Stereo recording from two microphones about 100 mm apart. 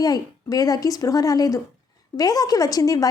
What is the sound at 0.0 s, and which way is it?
A woman's voice, 35° left (ahead or behind).